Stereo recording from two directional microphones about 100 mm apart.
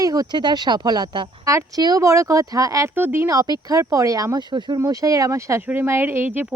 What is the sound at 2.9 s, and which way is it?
Speech, 20° right (ahead or behind).